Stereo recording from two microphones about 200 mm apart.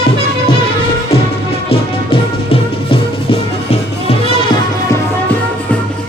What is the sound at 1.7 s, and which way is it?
Music, 30° left (ahead or behind).